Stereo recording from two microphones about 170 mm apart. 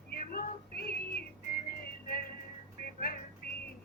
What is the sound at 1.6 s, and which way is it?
Music, 60° left (ahead or behind).